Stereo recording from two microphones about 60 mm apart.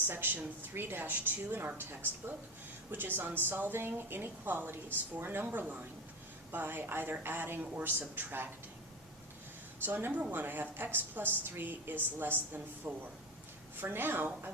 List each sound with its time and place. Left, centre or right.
0.1 s a woman's voice: right
9.8 s a woman's voice: right
10.1 s speech: right
10.3 s a woman's voice: right